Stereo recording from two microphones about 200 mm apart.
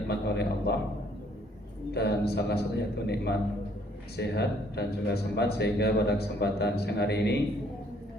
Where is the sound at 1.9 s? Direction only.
55° left (ahead or behind).